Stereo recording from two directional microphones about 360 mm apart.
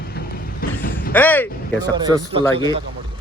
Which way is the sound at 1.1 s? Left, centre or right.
Centre.